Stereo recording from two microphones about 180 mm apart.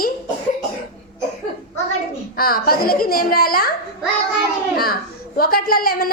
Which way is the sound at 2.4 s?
55° left (ahead or behind).